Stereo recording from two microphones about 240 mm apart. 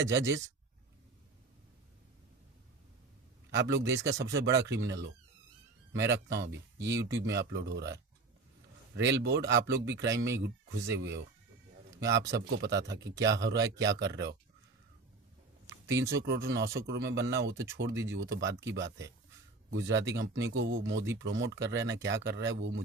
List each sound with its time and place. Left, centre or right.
3.5 s a man's voice: right
15.9 s speech: centre
16.2 s speech: right